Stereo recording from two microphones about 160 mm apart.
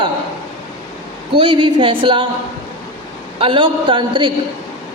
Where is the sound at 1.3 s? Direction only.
30° right (ahead or behind).